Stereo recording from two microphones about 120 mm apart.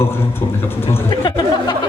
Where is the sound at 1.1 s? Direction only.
40° left (ahead or behind).